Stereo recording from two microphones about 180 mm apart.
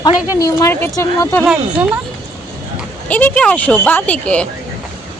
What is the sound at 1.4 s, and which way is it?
Speech, 5° right (ahead or behind).